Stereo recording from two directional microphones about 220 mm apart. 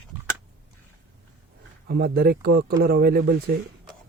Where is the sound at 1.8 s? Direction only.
45° right (ahead or behind).